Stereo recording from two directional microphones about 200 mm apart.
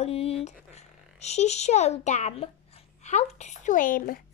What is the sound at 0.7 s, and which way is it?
A child's voice, 35° left (ahead or behind).